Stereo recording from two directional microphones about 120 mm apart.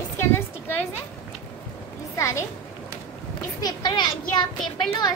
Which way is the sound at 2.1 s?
25° left (ahead or behind).